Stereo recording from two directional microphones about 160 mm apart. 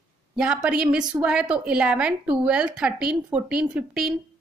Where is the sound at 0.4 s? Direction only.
5° right (ahead or behind).